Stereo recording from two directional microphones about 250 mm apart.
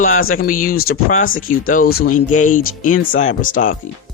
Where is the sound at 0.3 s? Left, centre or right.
Left.